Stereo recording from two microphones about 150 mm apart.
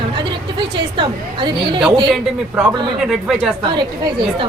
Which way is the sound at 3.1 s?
Centre (ahead or behind).